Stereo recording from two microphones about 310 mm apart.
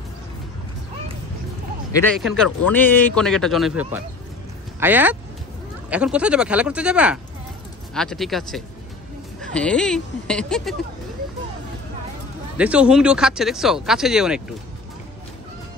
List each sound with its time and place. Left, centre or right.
2.1 s a man's voice: centre
12.5 s a man's voice: centre